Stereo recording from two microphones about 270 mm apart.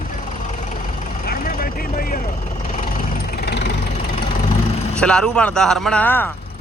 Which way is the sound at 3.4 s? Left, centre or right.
Left.